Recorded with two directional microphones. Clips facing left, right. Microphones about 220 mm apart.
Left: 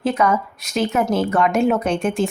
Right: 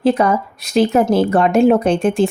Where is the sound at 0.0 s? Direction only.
35° right (ahead or behind).